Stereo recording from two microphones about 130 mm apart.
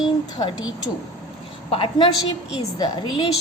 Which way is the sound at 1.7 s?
40° left (ahead or behind).